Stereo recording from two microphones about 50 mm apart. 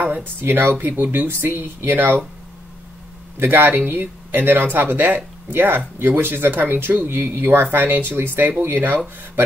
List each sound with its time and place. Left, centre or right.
0.0 s speech: right
3.3 s speech: right